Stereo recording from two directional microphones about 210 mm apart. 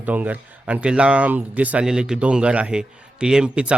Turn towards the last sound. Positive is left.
turn(degrees=-5)  # may be behind; listen again after turning